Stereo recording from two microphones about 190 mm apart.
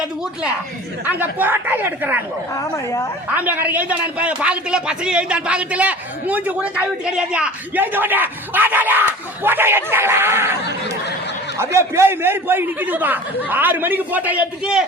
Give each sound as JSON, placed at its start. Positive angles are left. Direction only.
{"t": 1.0, "sound": "a man's voice", "side_deg": -10}
{"t": 2.6, "sound": "speech", "side_deg": 15}
{"t": 3.3, "sound": "a man's voice", "side_deg": -10}